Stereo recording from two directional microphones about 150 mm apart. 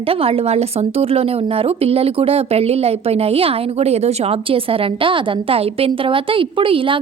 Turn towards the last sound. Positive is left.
turn(degrees=-35)  # may be behind; listen again after turning